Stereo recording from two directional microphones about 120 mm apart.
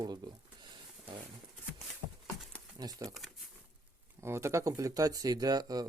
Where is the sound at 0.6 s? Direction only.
40° right (ahead or behind).